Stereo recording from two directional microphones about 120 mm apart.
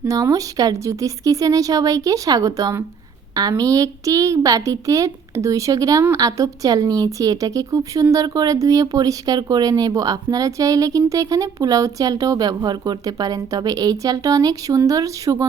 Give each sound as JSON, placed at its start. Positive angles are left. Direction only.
{"t": 0.0, "sound": "a woman's voice", "side_deg": -25}